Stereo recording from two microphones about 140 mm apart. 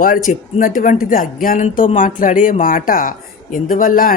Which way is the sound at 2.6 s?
85° left.